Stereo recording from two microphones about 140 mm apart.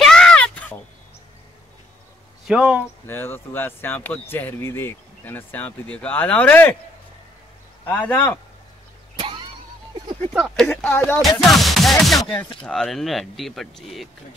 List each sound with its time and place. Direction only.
0.0 s a sound: 5° left (ahead or behind)
2.4 s speech: 5° right (ahead or behind)
3.1 s speech: 15° left (ahead or behind)
7.8 s speech: 10° left (ahead or behind)
9.2 s vehicle: 35° right (ahead or behind)
10.4 s speech: 5° left (ahead or behind)
11.4 s music: centre (ahead or behind)
12.6 s speech: 5° left (ahead or behind)